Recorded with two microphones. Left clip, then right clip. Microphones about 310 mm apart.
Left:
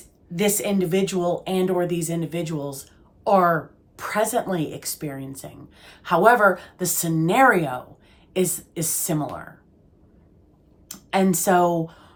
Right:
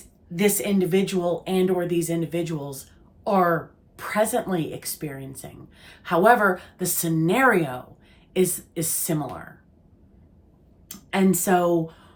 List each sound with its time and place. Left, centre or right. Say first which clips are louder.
0.3 s speech: even; centre
10.8 s speech: left 2 dB; centre